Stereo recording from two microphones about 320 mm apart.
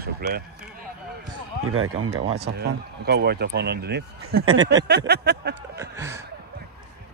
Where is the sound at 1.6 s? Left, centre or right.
Right.